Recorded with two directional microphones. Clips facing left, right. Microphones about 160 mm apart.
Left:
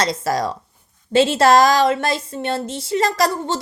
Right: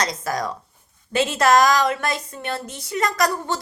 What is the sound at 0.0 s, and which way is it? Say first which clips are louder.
A woman's voice: left 4 dB; 30° left (ahead or behind).